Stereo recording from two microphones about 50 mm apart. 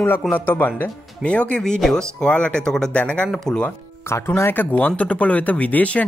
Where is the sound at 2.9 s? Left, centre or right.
Left.